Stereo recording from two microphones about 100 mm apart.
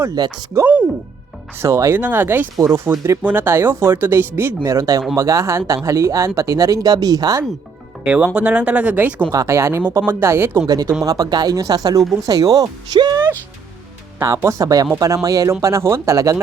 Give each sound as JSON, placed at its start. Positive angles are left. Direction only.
{"t": 0.2, "sound": "speech", "side_deg": -40}
{"t": 0.5, "sound": "speech", "side_deg": -30}
{"t": 2.0, "sound": "speech", "side_deg": -20}
{"t": 3.2, "sound": "speech", "side_deg": -20}
{"t": 8.0, "sound": "speech", "side_deg": -10}
{"t": 9.3, "sound": "speech", "side_deg": -30}
{"t": 11.0, "sound": "speech", "side_deg": -35}
{"t": 14.2, "sound": "speech", "side_deg": -30}